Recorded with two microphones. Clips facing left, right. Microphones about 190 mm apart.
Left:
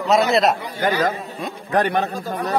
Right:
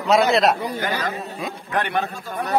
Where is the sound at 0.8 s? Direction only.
45° left (ahead or behind).